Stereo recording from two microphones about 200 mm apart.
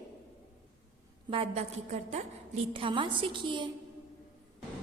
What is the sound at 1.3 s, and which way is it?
A woman's voice, 30° right (ahead or behind).